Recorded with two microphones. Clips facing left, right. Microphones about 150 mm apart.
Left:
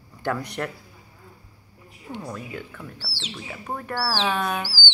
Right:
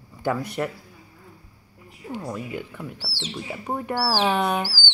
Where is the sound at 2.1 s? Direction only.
5° right (ahead or behind).